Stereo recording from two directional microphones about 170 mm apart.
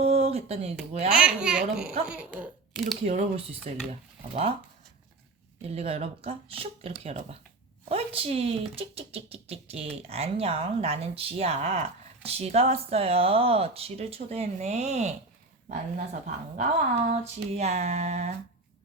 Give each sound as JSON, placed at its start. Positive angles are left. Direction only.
{"t": 0.0, "sound": "a sound", "side_deg": -35}
{"t": 1.1, "sound": "a child's voice", "side_deg": -5}
{"t": 3.0, "sound": "speech", "side_deg": -35}
{"t": 5.6, "sound": "speech", "side_deg": -35}